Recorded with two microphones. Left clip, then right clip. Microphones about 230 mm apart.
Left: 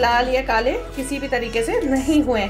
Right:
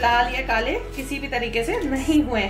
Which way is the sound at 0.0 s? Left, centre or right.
Left.